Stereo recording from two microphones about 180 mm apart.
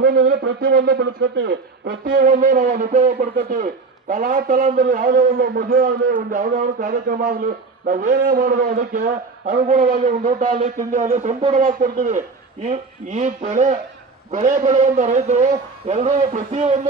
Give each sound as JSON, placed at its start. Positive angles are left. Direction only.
{"t": 0.0, "sound": "a man's voice", "side_deg": -55}